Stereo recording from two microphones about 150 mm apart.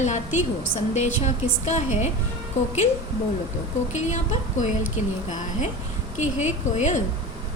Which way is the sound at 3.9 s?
50° left (ahead or behind).